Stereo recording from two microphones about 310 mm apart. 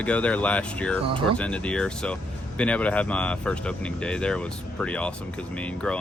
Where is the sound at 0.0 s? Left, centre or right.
Centre.